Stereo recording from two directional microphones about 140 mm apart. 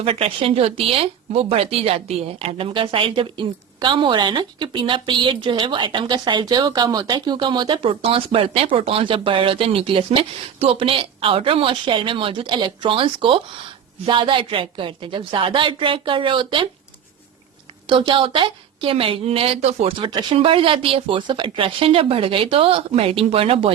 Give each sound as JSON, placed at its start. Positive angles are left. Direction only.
{"t": 0.0, "sound": "speech", "side_deg": -45}
{"t": 17.8, "sound": "speech", "side_deg": -40}